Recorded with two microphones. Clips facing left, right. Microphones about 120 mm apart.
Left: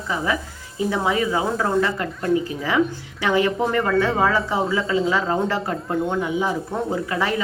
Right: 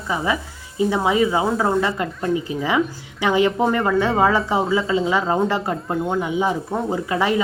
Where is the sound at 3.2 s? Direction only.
15° right (ahead or behind).